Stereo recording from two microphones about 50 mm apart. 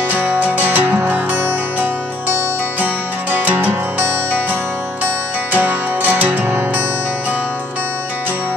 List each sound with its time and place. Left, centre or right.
0.1 s music: right
5.5 s music: right